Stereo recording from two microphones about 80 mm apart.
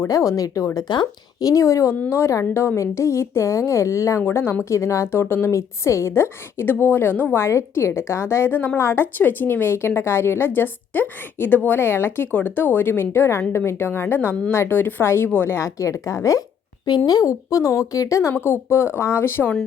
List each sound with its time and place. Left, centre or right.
0.1 s a woman's voice: left
4.3 s a woman's voice: left
7.4 s a woman's voice: left
9.1 s a woman's voice: left